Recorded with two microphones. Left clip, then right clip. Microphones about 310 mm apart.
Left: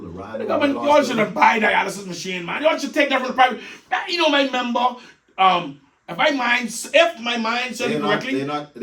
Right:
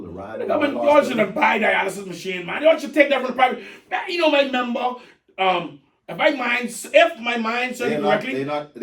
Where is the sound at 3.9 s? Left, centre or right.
Centre.